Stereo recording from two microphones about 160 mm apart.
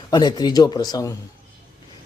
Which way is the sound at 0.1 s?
25° left (ahead or behind).